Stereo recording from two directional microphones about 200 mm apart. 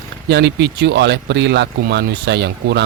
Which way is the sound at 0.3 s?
60° right (ahead or behind).